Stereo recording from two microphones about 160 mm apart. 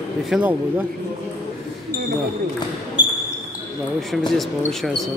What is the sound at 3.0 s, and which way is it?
Basketball bounce, 30° left (ahead or behind).